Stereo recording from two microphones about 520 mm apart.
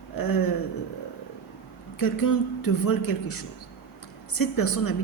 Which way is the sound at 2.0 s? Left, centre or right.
Left.